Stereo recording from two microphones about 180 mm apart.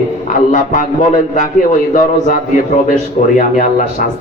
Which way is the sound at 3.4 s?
45° left (ahead or behind).